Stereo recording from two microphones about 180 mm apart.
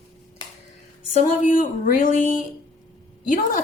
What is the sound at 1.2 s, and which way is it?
A woman's voice, 45° left (ahead or behind).